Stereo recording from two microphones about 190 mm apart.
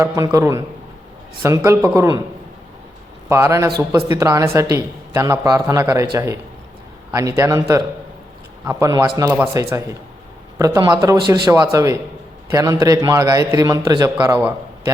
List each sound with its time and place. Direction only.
0.0 s a man's voice: 15° right (ahead or behind)
3.2 s a man's voice: 15° right (ahead or behind)
7.1 s a man's voice: 15° right (ahead or behind)
8.6 s a man's voice: 15° right (ahead or behind)